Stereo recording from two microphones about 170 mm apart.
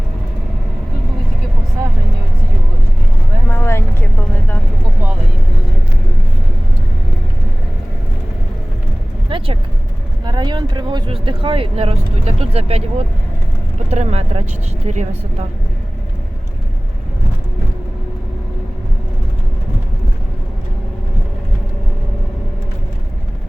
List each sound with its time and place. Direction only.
3.5 s vehicle: 15° left (ahead or behind)
9.3 s vehicle: 30° right (ahead or behind)
10.2 s a sound: 25° right (ahead or behind)
13.9 s a woman's voice: 40° right (ahead or behind)